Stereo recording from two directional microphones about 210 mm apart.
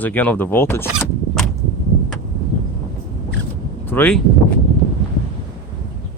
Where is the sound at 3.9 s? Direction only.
10° left (ahead or behind).